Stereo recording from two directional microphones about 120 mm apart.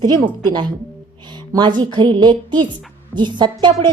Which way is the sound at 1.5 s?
40° right (ahead or behind).